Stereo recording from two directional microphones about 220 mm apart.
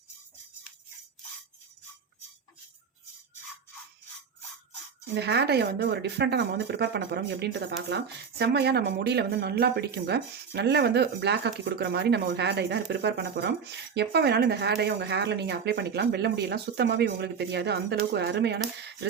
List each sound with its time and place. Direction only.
5.1 s speech: 50° right (ahead or behind)